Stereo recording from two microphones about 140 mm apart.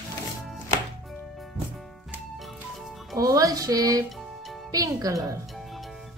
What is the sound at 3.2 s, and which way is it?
Music, 25° right (ahead or behind).